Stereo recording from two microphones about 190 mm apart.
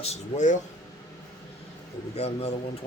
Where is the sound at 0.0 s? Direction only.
35° left (ahead or behind).